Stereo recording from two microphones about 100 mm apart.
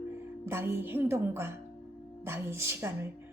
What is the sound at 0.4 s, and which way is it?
Speech, 25° right (ahead or behind).